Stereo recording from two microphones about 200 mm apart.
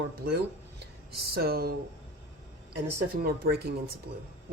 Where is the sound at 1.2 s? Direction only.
50° right (ahead or behind).